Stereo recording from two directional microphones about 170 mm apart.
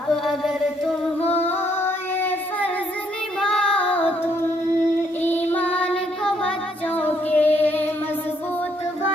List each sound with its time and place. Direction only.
1.3 s child singing: 10° left (ahead or behind)
5.5 s child singing: 10° left (ahead or behind)
6.9 s female singing: 10° left (ahead or behind)